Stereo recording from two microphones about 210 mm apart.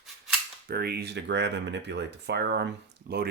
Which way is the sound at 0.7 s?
50° right (ahead or behind).